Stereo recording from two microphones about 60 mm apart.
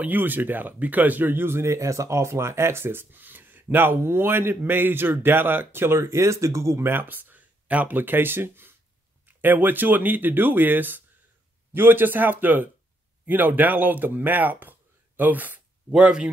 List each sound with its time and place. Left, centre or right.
0.0 s speech: right
6.9 s speech: right
15.9 s speech: centre